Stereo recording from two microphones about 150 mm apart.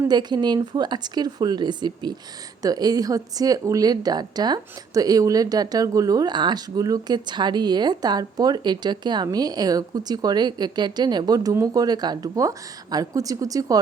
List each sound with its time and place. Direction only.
0.1 s a woman's voice: 30° right (ahead or behind)